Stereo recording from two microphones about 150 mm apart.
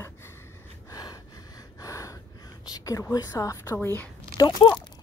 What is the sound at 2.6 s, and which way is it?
A woman's voice, 25° left (ahead or behind).